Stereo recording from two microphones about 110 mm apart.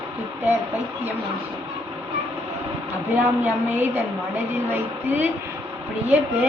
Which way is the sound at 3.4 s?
15° right (ahead or behind).